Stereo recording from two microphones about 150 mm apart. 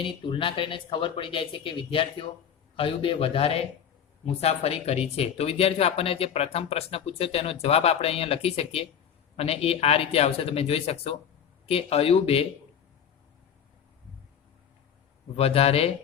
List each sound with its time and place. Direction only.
0.0 s speech: 35° left (ahead or behind)
15.4 s speech: 40° left (ahead or behind)